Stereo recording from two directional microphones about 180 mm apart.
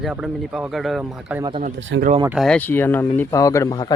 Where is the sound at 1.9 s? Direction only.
90° right.